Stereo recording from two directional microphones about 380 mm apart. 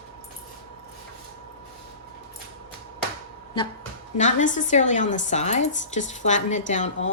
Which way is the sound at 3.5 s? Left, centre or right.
Centre.